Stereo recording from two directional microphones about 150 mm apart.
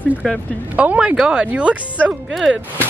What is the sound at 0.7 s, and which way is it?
Speech, 10° right (ahead or behind).